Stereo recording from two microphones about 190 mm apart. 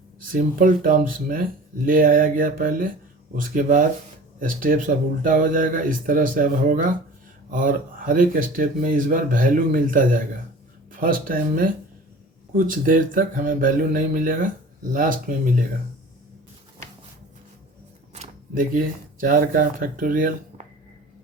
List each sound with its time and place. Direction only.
0.2 s speech: 45° right (ahead or behind)
18.1 s speech: 40° right (ahead or behind)